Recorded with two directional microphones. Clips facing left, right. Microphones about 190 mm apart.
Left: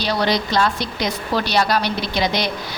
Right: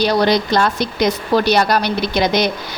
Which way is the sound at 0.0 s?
45° right (ahead or behind).